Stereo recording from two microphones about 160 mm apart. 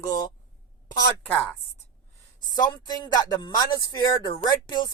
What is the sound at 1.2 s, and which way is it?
Speech, 5° left (ahead or behind).